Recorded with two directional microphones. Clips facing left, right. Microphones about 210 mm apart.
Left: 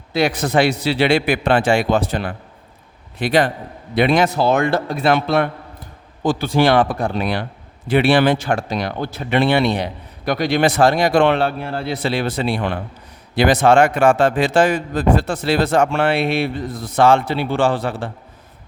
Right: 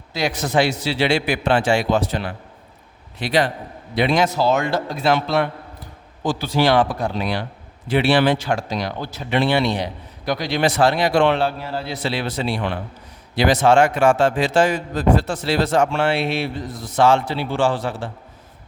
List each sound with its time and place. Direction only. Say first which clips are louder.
0.1 s a man's voice: left 4 dB; 60° left (ahead or behind)